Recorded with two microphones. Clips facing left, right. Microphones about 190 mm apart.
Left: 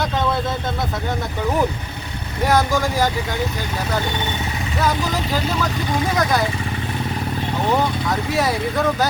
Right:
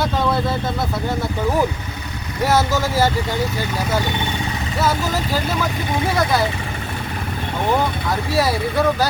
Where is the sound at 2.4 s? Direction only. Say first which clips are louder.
Even; 5° right (ahead or behind).